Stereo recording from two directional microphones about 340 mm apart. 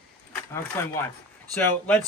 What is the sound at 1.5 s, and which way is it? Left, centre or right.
Speech, centre.